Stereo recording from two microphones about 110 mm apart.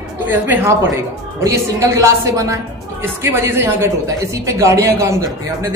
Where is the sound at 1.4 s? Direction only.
25° right (ahead or behind).